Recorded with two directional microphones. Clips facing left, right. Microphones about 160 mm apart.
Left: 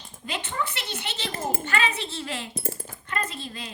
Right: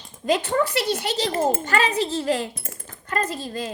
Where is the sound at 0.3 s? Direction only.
40° right (ahead or behind).